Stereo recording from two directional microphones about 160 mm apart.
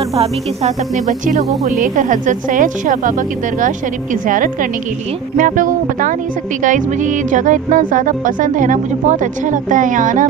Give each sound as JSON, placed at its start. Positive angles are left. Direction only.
{"t": 0.2, "sound": "a woman's voice", "side_deg": -45}